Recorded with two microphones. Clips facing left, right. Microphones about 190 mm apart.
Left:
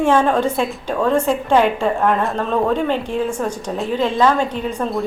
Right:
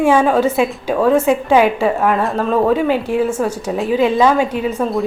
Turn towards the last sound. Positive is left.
turn(degrees=0)  # may be behind; listen again after turning